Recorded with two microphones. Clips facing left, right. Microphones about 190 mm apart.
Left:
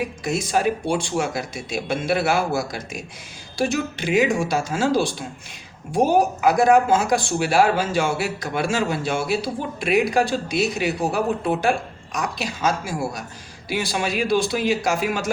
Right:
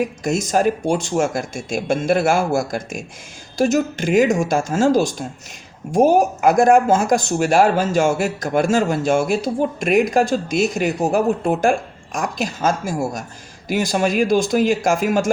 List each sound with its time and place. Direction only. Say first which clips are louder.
0.0 s speech: right 4 dB; 45° right (ahead or behind)